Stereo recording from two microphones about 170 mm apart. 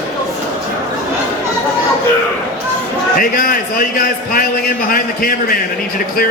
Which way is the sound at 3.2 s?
55° left (ahead or behind).